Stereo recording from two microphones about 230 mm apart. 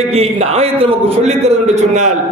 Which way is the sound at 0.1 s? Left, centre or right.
Right.